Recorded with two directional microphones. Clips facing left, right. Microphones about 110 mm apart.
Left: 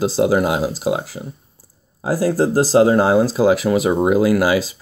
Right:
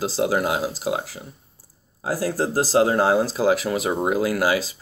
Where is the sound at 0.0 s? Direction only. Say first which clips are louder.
Left 6 dB; 20° left (ahead or behind).